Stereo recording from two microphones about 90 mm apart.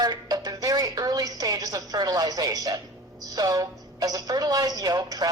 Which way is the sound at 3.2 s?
45° right (ahead or behind).